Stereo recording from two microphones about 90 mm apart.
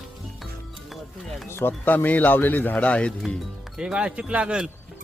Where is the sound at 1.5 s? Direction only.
25° left (ahead or behind).